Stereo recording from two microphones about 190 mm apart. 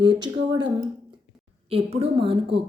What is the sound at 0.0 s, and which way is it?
Speech, 25° right (ahead or behind).